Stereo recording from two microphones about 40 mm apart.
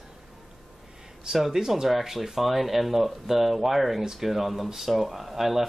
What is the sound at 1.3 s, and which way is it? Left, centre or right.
Speech, centre.